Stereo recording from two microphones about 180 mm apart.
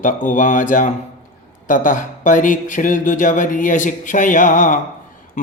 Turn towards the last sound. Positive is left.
turn(degrees=45)  # may be behind; listen again after turning